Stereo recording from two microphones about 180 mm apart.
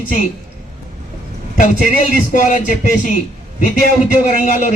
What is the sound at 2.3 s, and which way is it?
Speech, 50° left (ahead or behind).